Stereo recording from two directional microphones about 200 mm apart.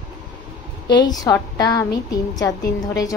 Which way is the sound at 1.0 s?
20° left (ahead or behind).